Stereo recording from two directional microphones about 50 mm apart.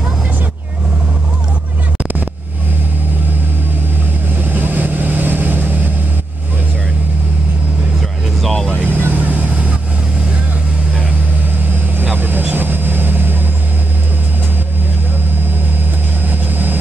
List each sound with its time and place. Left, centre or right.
4.4 s vehicle: right
8.4 s vehicle: centre
8.7 s vehicle: right
12.0 s vehicle: right
16.3 s vehicle: right